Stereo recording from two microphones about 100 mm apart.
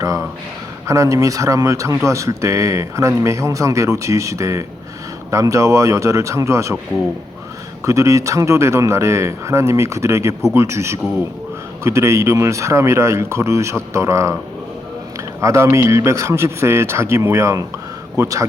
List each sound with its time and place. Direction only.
0.9 s speech: 30° right (ahead or behind)
7.9 s speech: 30° right (ahead or behind)
15.4 s speech: 30° right (ahead or behind)